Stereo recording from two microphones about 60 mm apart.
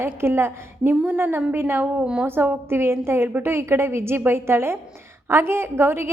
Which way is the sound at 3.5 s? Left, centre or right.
Right.